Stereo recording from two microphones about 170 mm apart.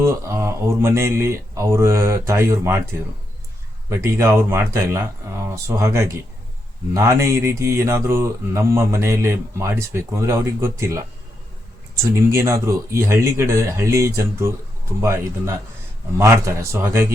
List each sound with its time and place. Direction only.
0.0 s mantra: 15° right (ahead or behind)
3.8 s mantra: 15° right (ahead or behind)
12.3 s mantra: 15° right (ahead or behind)